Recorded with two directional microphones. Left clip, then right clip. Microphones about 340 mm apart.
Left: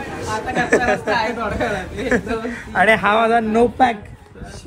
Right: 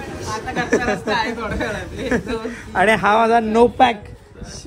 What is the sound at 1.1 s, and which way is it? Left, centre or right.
Speech, centre.